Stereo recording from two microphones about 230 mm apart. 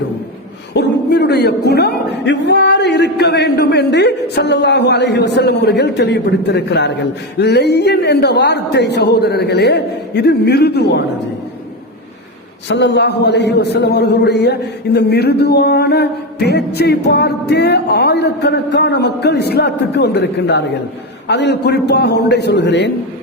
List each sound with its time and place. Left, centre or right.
0.7 s a man's voice: left
12.6 s a man's voice: left